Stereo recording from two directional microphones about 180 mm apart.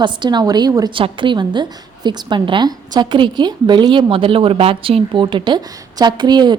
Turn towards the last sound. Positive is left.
turn(degrees=-25)  # may be behind; listen again after turning